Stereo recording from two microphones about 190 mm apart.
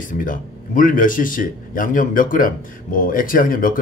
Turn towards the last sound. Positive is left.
turn(degrees=45)  # may be behind; listen again after turning